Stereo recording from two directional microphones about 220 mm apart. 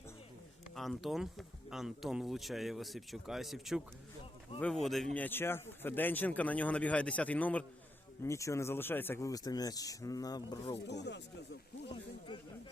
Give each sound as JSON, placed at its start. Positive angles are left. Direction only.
{"t": 0.8, "sound": "speech", "side_deg": 0}
{"t": 10.8, "sound": "speech", "side_deg": 50}